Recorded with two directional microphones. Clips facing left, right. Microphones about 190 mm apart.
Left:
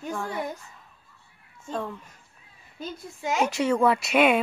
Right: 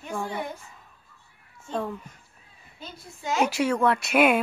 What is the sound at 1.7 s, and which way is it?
Speech, 5° right (ahead or behind).